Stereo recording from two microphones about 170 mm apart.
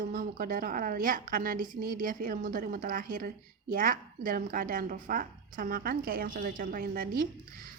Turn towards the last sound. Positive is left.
turn(degrees=-60)  # may be behind; listen again after turning